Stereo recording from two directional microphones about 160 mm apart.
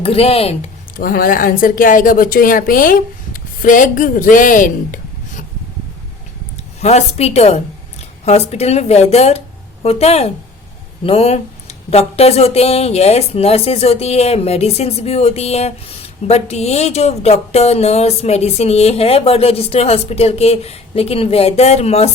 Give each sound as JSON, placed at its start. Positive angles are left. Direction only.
{"t": 0.0, "sound": "speech", "side_deg": 35}
{"t": 0.9, "sound": "speech", "side_deg": 60}
{"t": 6.8, "sound": "speech", "side_deg": 45}